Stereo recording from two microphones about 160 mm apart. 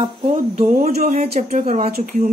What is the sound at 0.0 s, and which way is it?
Speech, 35° right (ahead or behind).